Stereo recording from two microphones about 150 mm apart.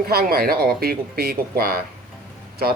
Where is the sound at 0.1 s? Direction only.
90° right.